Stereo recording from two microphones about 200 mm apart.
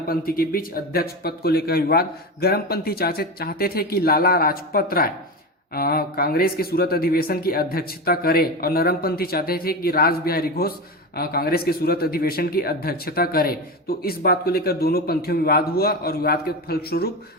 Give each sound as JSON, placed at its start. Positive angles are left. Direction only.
{"t": 0.1, "sound": "speech", "side_deg": 50}